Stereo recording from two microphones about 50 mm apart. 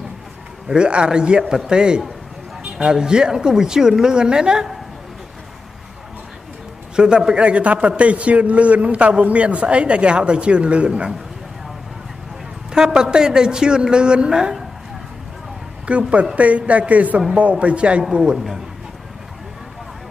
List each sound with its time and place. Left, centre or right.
0.7 s a man's voice: right
7.0 s a man's voice: centre
12.7 s a woman's voice: centre
15.9 s a man's voice: right